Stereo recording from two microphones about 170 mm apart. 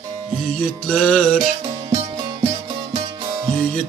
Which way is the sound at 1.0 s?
5° left (ahead or behind).